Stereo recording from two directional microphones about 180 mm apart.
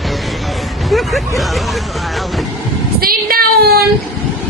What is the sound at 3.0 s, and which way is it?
Child singing, 55° right (ahead or behind).